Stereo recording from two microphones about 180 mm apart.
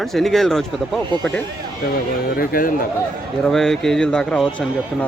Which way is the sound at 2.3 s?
55° left (ahead or behind).